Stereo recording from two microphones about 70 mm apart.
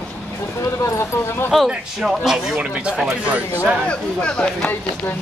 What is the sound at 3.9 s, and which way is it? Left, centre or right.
Speech, centre.